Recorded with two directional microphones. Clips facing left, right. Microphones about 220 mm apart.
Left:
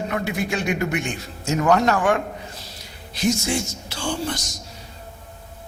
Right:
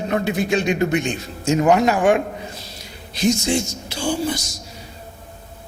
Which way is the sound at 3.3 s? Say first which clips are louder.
Right 3 dB; 25° right (ahead or behind).